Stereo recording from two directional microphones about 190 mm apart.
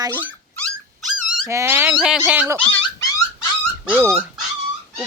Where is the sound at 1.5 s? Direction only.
15° right (ahead or behind).